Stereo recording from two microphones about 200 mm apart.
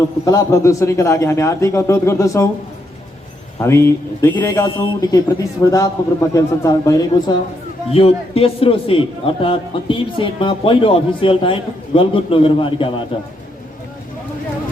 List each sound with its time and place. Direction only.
0.3 s a man's voice: 15° left (ahead or behind)
3.6 s a man's voice: 15° left (ahead or behind)
7.9 s a man's voice: 30° left (ahead or behind)